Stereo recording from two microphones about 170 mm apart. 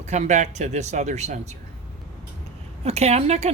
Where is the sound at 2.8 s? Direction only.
40° right (ahead or behind).